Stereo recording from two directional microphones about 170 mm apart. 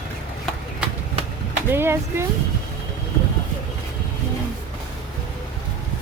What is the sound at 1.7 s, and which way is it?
Speech, 15° right (ahead or behind).